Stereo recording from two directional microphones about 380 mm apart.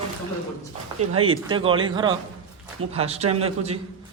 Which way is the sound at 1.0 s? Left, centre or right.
Centre.